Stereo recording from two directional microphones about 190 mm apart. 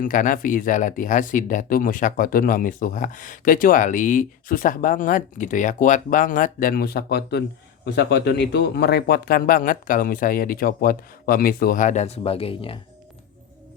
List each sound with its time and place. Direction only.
0.0 s speech: 45° left (ahead or behind); by 12.8 s 30° left (ahead or behind)